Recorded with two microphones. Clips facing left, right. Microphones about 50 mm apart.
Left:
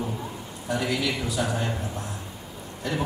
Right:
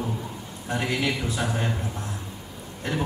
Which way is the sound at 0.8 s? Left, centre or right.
Right.